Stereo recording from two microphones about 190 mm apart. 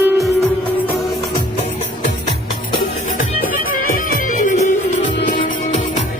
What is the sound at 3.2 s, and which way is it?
Music, 45° left (ahead or behind).